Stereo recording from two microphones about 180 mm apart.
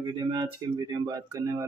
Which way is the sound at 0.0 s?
25° right (ahead or behind).